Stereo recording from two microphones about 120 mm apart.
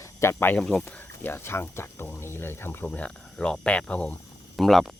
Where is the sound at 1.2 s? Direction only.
20° left (ahead or behind).